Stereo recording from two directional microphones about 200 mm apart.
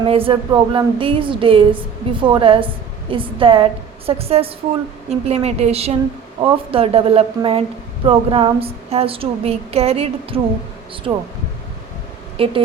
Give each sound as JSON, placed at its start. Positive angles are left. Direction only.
{"t": 0.0, "sound": "speech", "side_deg": -25}
{"t": 5.2, "sound": "a sound", "side_deg": -30}
{"t": 6.4, "sound": "speech", "side_deg": -30}
{"t": 12.4, "sound": "speech", "side_deg": -25}